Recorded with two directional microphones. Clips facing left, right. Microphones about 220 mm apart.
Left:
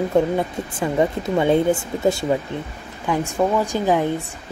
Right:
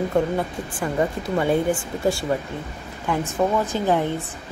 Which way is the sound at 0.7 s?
20° left (ahead or behind).